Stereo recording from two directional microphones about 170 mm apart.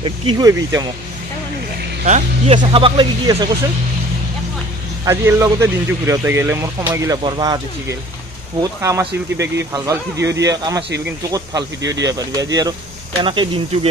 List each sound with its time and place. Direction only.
0.0 s speech: 25° right (ahead or behind)
2.0 s speech: 40° right (ahead or behind)
2.5 s speech: 30° right (ahead or behind)
5.0 s speech: 15° right (ahead or behind)